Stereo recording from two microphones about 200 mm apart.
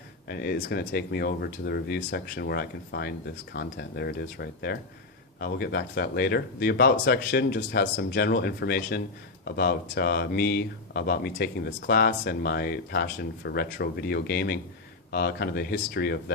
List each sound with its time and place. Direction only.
0.3 s speech: 50° left (ahead or behind)